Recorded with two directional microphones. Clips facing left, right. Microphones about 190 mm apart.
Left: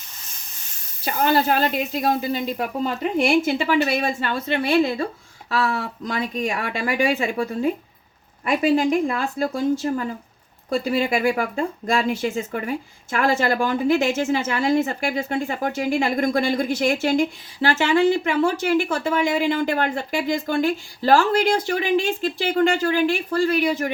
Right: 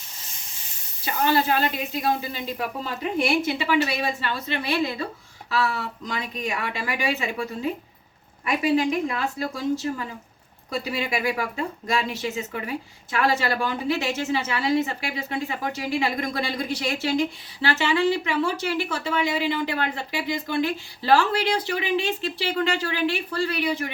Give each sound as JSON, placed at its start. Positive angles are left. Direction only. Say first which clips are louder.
{"t": 1.0, "sound": "speech", "louder": "left 3 dB", "side_deg": 40}
{"t": 3.9, "sound": "speech", "louder": "left 4 dB", "side_deg": 50}